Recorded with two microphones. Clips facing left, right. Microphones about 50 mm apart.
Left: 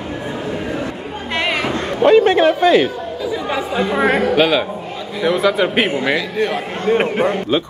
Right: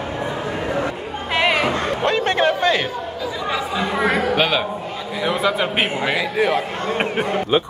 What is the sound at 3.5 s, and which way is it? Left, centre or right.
Speech, centre.